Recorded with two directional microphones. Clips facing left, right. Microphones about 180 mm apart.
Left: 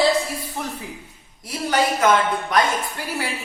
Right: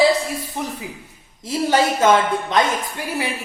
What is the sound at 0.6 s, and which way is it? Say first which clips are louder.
A woman's voice: right 2 dB; 20° right (ahead or behind).